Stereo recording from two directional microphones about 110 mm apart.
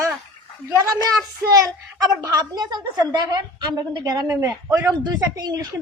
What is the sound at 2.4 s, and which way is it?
A woman's voice, 40° right (ahead or behind).